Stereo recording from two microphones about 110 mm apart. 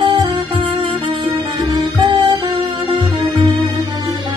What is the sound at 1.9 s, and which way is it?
Music, 55° right (ahead or behind).